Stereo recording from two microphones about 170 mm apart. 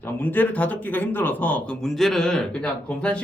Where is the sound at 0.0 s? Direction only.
10° left (ahead or behind).